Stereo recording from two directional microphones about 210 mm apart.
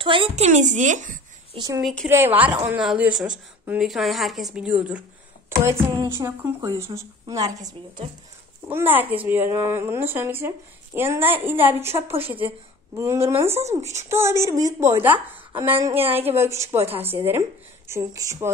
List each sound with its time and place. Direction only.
0.0 s a woman's voice: 25° right (ahead or behind)
1.8 s speech: centre (ahead or behind)
2.0 s a woman's voice: 10° right (ahead or behind)
16.7 s speech: 30° right (ahead or behind)
17.0 s a woman's voice: 10° right (ahead or behind)